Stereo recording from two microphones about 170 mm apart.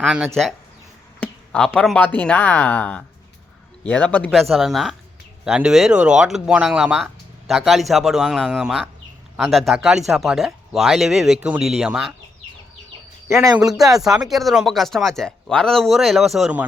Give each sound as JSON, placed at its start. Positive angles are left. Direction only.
{"t": 0.0, "sound": "speech", "side_deg": -5}
{"t": 1.2, "sound": "speech", "side_deg": 5}
{"t": 13.4, "sound": "a man's voice", "side_deg": -20}
{"t": 13.7, "sound": "speech", "side_deg": 0}